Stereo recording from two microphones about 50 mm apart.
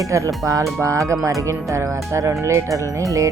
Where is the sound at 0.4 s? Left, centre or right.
Right.